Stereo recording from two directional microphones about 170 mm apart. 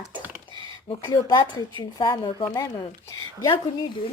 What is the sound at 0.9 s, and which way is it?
Speech, 25° left (ahead or behind).